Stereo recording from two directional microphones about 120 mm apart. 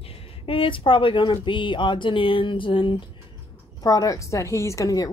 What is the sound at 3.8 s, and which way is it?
A woman's voice, 30° left (ahead or behind).